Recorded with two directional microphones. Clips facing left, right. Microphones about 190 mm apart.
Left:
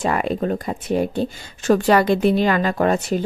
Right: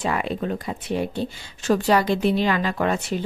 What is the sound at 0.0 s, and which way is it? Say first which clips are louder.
A woman's voice: left 4 dB; 45° left (ahead or behind).